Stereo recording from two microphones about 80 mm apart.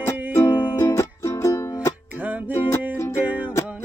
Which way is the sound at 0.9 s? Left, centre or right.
Left.